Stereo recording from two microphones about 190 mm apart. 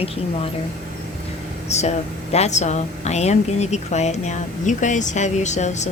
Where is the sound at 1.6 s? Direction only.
35° left (ahead or behind).